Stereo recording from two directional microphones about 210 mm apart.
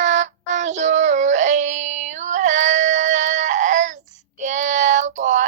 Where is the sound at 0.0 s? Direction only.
35° right (ahead or behind).